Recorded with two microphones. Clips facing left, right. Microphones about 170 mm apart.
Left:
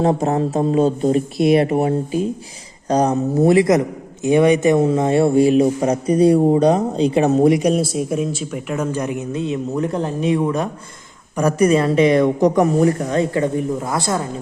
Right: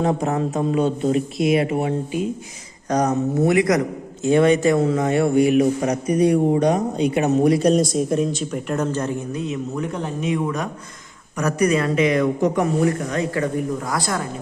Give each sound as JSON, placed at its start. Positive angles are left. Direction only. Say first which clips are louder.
{"t": 0.0, "sound": "a man's voice", "louder": "left 3 dB", "side_deg": 35}
{"t": 7.5, "sound": "a man's voice", "louder": "even", "side_deg": 10}